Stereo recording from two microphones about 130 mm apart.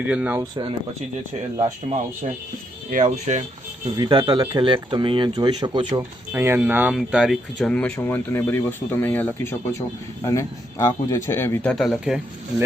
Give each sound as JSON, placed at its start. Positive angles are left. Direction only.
{"t": 0.0, "sound": "speech", "side_deg": -10}
{"t": 1.9, "sound": "speech", "side_deg": -65}
{"t": 3.8, "sound": "speech", "side_deg": -35}
{"t": 6.0, "sound": "speech", "side_deg": -20}
{"t": 7.7, "sound": "speech", "side_deg": 10}
{"t": 11.7, "sound": "speech", "side_deg": 0}